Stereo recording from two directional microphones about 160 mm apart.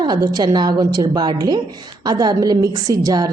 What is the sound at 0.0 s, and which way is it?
A woman's voice, 25° right (ahead or behind).